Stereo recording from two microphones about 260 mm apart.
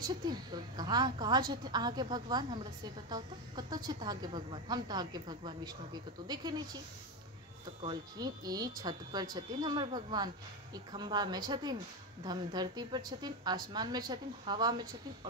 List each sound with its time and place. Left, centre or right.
0.0 s a woman's voice: centre
7.8 s a woman's voice: centre